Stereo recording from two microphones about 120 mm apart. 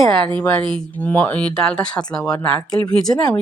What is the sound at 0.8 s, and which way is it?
Speech, 15° left (ahead or behind).